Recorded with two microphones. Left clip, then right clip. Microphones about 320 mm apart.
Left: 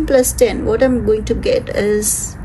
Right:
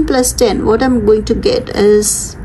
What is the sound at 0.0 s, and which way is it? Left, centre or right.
A woman's voice, centre.